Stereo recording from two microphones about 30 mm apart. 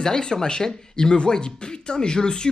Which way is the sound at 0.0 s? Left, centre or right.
Centre.